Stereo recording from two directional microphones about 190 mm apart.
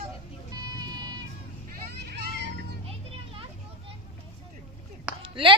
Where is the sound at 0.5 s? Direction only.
20° right (ahead or behind).